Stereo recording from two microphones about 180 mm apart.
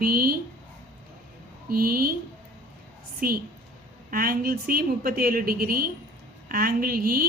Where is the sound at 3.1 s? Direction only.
55° right (ahead or behind).